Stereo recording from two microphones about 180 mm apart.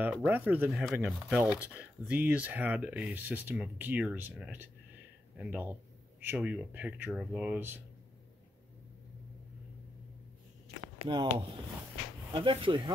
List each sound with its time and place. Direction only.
0.0 s speech: 10° right (ahead or behind)
11.1 s speech: 25° right (ahead or behind)